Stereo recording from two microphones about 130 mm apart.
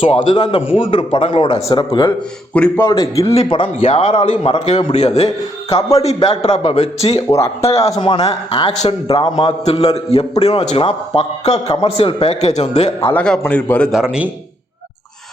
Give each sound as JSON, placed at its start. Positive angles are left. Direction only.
{"t": 0.0, "sound": "speech", "side_deg": 45}
{"t": 2.5, "sound": "a man's voice", "side_deg": 10}
{"t": 2.8, "sound": "a man's voice", "side_deg": 30}
{"t": 3.3, "sound": "a man's voice", "side_deg": 45}
{"t": 7.3, "sound": "a man's voice", "side_deg": 20}
{"t": 7.6, "sound": "a man's voice", "side_deg": 50}
{"t": 8.9, "sound": "a man's voice", "side_deg": 45}
{"t": 13.1, "sound": "a man's voice", "side_deg": 5}
{"t": 13.9, "sound": "a man's voice", "side_deg": -5}